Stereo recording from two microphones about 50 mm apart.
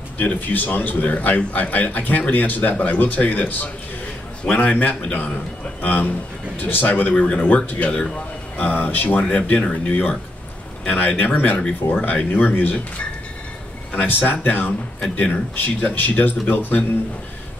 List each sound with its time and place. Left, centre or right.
0.2 s speech: left
9.2 s speech: left
14.0 s speech: left